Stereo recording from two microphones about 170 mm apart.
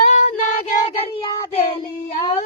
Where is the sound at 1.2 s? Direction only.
35° left (ahead or behind).